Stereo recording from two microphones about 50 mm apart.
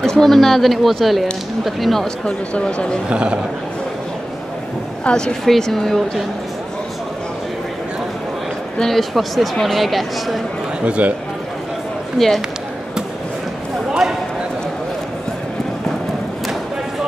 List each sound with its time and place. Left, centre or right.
0.0 s speech: centre
2.2 s speech: centre
3.1 s a man's voice: right
5.0 s speech: centre
8.7 s speech: centre
10.9 s a man's voice: right
12.2 s speech: centre